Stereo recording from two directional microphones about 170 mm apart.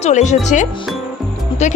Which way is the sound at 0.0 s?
45° left (ahead or behind).